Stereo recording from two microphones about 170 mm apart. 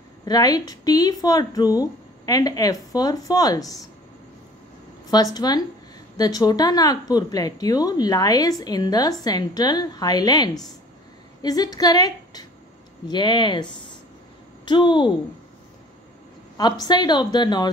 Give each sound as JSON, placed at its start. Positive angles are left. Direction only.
{"t": 0.2, "sound": "speech", "side_deg": 20}
{"t": 5.1, "sound": "speech", "side_deg": 25}
{"t": 16.5, "sound": "speech", "side_deg": 25}